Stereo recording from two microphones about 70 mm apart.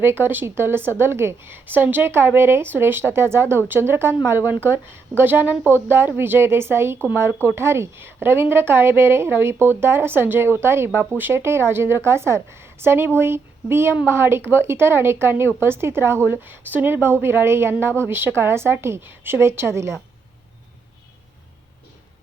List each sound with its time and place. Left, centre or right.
0.0 s a woman's voice: right